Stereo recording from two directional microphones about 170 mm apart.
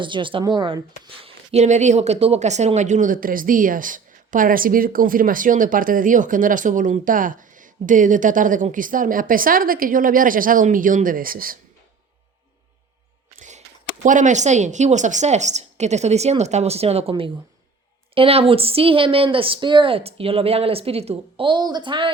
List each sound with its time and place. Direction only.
0.0 s speech: 30° right (ahead or behind); by 11.5 s 55° right (ahead or behind)
13.3 s a sound: 45° right (ahead or behind)
14.0 s speech: 50° right (ahead or behind); by 22.1 s 30° right (ahead or behind)